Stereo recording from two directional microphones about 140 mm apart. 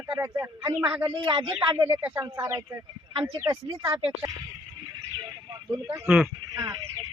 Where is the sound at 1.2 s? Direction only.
40° right (ahead or behind).